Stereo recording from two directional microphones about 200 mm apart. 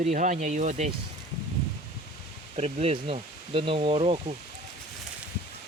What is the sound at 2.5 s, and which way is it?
Speech, 30° right (ahead or behind).